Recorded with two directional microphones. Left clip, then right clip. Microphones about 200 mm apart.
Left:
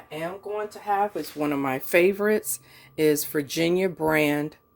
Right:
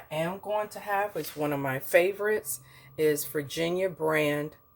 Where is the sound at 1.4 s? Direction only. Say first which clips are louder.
Left 4 dB; 40° left (ahead or behind).